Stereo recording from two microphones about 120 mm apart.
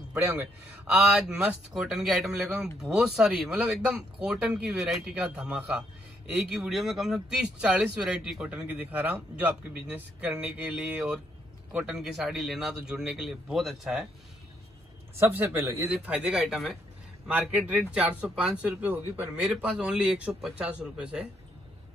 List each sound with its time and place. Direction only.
0.1 s a man's voice: 15° right (ahead or behind)
15.1 s a man's voice: 20° right (ahead or behind)
15.9 s a man's voice: 10° right (ahead or behind)